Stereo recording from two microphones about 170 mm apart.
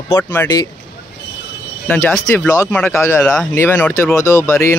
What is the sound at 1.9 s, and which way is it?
A man's voice, 15° left (ahead or behind).